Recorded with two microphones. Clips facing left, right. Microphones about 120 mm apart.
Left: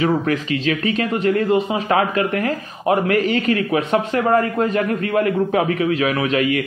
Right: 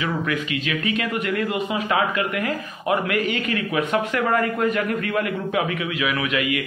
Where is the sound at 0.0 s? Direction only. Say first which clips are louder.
Left 6 dB; 35° left (ahead or behind).